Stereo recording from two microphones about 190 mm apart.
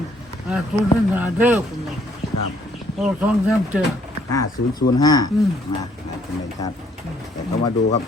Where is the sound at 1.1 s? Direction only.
10° right (ahead or behind).